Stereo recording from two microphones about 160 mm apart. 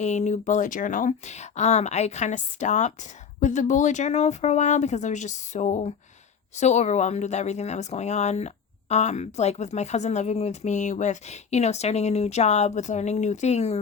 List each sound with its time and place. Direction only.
0.0 s speech: 45° left (ahead or behind)